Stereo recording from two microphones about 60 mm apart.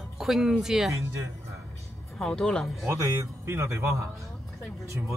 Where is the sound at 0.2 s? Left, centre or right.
Centre.